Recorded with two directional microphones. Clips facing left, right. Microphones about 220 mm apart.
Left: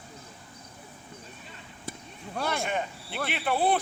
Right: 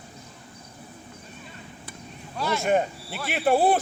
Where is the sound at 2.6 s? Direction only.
45° right (ahead or behind).